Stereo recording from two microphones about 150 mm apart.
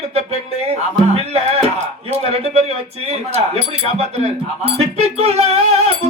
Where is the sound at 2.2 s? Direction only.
45° right (ahead or behind).